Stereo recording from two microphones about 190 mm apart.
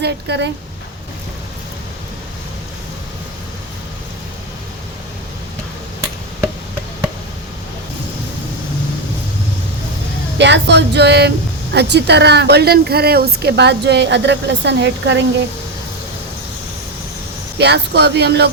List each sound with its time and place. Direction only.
0.0 s speech: 65° right (ahead or behind)
10.3 s speech: 65° right (ahead or behind)
17.6 s speech: 60° right (ahead or behind)